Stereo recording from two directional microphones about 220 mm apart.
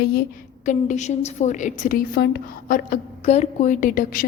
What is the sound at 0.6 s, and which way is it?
A woman's voice, 35° left (ahead or behind).